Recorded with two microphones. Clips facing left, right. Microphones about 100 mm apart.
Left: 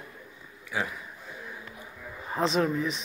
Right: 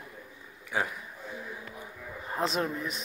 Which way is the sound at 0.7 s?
40° right (ahead or behind).